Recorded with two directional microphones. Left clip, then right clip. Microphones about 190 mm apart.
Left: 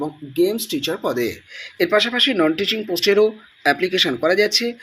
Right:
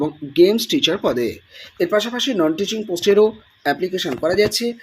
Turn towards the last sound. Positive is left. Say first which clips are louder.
# even
turn(degrees=-10)  # may be behind; listen again after turning